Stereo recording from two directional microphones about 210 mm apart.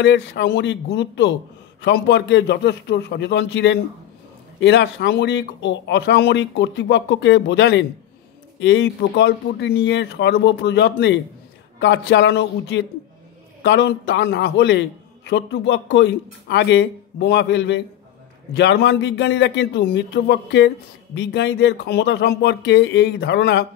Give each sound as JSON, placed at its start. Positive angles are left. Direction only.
{"t": 0.0, "sound": "a man's voice", "side_deg": 55}